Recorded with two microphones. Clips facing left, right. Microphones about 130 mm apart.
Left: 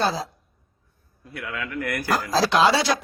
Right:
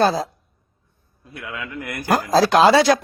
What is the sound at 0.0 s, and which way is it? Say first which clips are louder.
Speech: right 6 dB; 50° right (ahead or behind).